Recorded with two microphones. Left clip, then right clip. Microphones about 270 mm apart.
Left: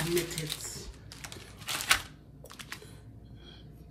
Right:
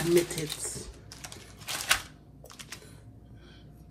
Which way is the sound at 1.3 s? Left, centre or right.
Centre.